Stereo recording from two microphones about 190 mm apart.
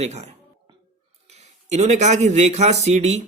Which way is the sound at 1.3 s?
35° right (ahead or behind).